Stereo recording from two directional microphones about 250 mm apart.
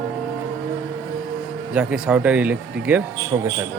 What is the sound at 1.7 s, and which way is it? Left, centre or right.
Speech, centre.